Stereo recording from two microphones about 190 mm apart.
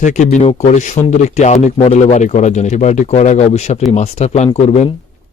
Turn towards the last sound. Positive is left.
turn(degrees=35)  # may be behind; listen again after turning